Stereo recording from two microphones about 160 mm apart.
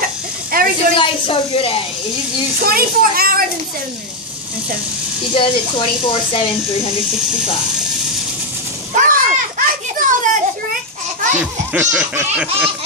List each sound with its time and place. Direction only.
0.0 s a sound: 65° right (ahead or behind)
0.9 s speech: 35° left (ahead or behind)
2.6 s a child's voice: 65° right (ahead or behind)
5.3 s speech: 35° left (ahead or behind)
8.9 s children playing: 60° right (ahead or behind)
11.7 s a sound: 10° right (ahead or behind)